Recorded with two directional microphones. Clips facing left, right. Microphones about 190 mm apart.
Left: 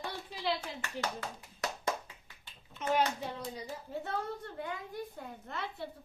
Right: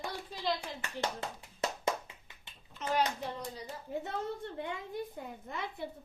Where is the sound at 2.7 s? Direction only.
5° left (ahead or behind).